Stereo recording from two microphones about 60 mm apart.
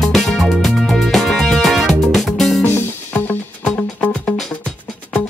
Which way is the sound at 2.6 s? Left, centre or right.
Left.